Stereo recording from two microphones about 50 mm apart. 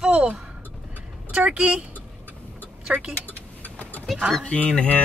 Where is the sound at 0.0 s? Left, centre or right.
Centre.